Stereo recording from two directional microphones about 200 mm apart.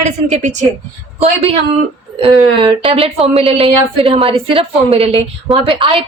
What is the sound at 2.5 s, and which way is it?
A woman's voice, 25° right (ahead or behind).